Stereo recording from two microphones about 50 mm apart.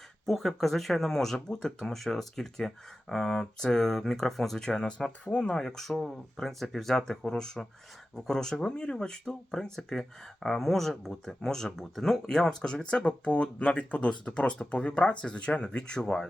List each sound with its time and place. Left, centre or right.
0.3 s speech: centre; by 5.6 s left
5.6 s speech: centre